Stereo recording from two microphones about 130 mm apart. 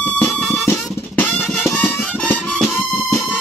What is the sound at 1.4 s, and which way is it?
Music, 5° left (ahead or behind).